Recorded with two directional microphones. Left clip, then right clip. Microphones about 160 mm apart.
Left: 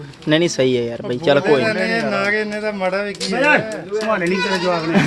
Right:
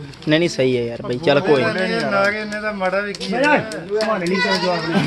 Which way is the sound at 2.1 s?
75° left (ahead or behind).